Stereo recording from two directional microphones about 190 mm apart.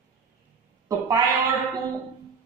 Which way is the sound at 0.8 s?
20° right (ahead or behind).